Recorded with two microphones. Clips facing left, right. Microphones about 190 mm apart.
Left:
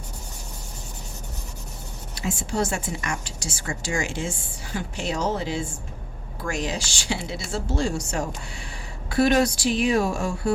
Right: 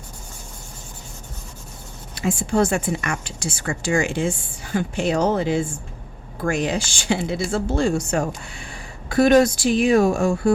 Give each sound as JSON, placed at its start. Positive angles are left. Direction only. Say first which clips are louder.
{"t": 2.1, "sound": "speech", "louder": "right 6 dB", "side_deg": -55}